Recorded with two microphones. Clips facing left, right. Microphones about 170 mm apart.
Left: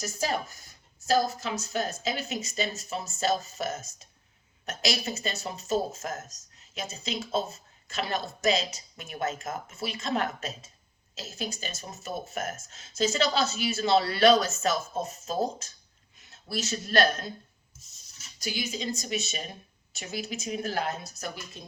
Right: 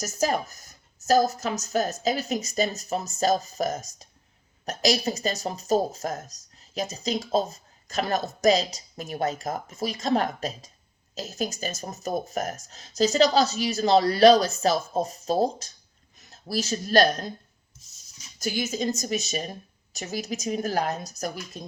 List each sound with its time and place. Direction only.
0.0 s a woman's voice: 45° right (ahead or behind)
18.3 s a woman's voice: 45° right (ahead or behind)